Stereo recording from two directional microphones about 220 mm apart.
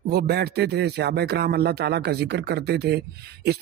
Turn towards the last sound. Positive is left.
turn(degrees=-45)  # may be behind; listen again after turning